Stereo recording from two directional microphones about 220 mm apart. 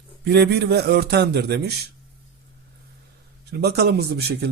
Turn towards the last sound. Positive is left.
turn(degrees=-45)  # may be behind; listen again after turning